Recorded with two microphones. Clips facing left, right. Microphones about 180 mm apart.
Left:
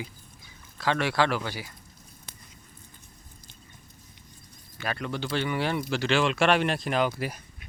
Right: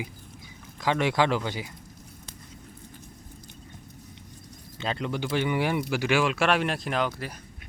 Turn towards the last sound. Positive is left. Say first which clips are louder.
# left 2 dB
turn(degrees=10)  # may be behind; listen again after turning